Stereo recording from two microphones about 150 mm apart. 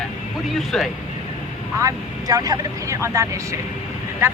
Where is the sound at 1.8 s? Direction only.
25° right (ahead or behind).